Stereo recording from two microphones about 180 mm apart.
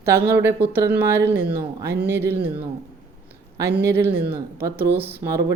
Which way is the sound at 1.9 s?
65° right (ahead or behind).